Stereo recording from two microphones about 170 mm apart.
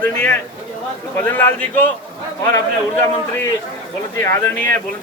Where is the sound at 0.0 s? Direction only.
10° left (ahead or behind).